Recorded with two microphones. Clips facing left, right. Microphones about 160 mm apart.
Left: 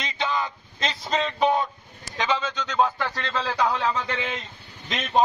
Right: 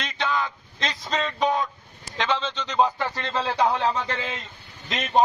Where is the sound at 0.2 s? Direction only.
Centre (ahead or behind).